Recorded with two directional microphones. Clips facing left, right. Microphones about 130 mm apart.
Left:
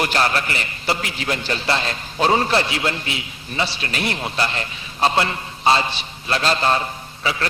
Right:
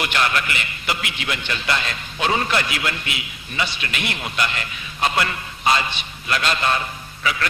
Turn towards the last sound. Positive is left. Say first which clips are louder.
# even
turn(degrees=30)  # may be behind; listen again after turning